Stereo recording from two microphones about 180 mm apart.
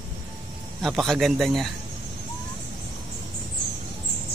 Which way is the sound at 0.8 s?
Centre (ahead or behind).